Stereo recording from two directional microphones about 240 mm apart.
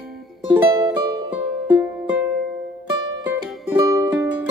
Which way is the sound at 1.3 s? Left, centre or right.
Centre.